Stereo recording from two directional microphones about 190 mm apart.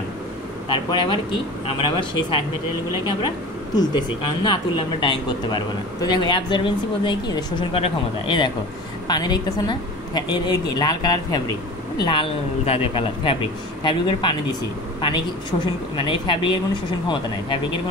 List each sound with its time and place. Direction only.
0.7 s a man's voice: 25° left (ahead or behind)
3.7 s a man's voice: 20° left (ahead or behind)